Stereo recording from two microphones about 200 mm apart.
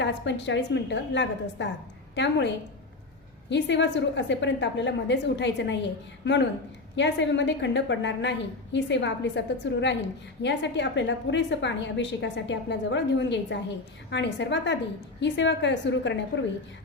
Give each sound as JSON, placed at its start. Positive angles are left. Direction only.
{"t": 0.0, "sound": "a woman's voice", "side_deg": 60}
{"t": 3.5, "sound": "a woman's voice", "side_deg": 60}